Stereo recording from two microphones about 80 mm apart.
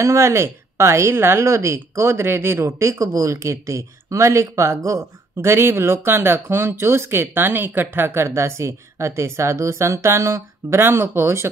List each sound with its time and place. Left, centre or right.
0.0 s speech: right